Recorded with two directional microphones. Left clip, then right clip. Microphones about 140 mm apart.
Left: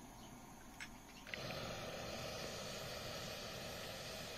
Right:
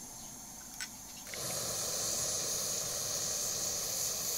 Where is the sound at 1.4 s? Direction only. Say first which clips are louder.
Right 10 dB; 20° right (ahead or behind).